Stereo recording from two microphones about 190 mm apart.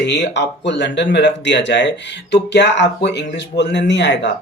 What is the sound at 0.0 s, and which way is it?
A man's voice, 65° left (ahead or behind).